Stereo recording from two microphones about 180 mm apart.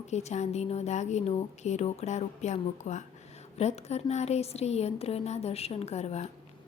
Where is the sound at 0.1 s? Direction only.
40° left (ahead or behind).